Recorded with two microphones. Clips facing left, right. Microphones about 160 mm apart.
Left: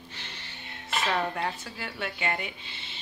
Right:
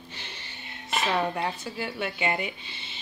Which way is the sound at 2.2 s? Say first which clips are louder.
Right 3 dB; 15° right (ahead or behind).